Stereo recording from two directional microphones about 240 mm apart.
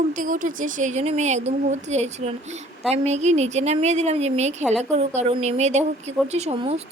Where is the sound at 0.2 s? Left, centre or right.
Right.